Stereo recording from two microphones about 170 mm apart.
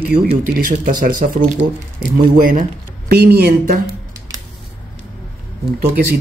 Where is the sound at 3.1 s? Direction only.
70° right (ahead or behind).